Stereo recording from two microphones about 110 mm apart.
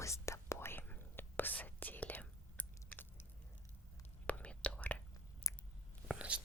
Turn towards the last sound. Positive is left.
turn(degrees=-10)  # may be behind; listen again after turning